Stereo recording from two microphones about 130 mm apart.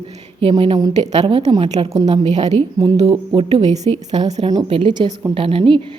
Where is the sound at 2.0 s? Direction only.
60° right (ahead or behind).